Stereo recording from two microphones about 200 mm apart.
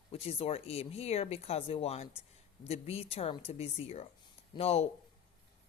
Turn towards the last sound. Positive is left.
turn(degrees=30)  # may be behind; listen again after turning